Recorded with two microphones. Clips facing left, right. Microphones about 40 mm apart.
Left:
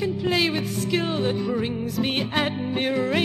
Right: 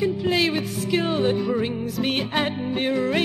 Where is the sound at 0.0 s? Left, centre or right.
Centre.